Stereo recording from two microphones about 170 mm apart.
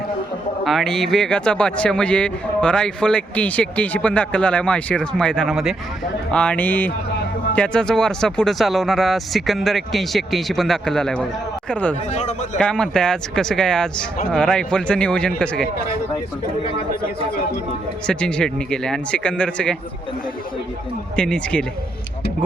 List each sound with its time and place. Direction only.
0.6 s speech: centre (ahead or behind)
12.1 s a man's voice: 45° left (ahead or behind)
12.5 s speech: 5° left (ahead or behind)
18.0 s speech: 5° left (ahead or behind)
21.2 s speech: 5° left (ahead or behind)